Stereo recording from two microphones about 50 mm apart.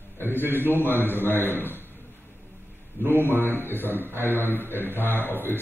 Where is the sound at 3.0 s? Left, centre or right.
Right.